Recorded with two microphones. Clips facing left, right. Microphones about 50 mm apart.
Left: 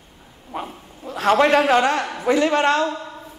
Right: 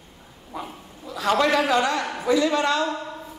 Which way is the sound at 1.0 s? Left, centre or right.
Left.